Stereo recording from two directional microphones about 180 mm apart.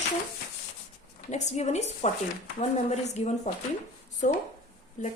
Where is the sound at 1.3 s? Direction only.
40° left (ahead or behind).